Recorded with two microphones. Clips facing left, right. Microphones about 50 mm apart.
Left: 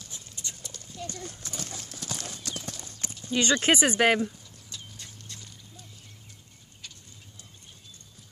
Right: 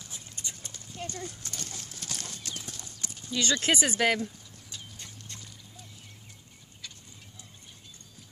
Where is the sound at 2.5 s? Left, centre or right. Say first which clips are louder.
Left 4 dB; left.